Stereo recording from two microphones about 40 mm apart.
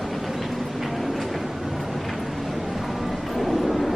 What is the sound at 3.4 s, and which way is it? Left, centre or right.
Vehicle, centre.